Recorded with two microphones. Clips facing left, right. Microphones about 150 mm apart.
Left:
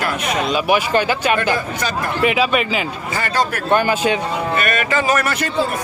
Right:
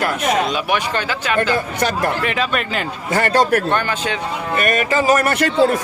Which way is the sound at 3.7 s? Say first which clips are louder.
Left 4 dB; 10° left (ahead or behind).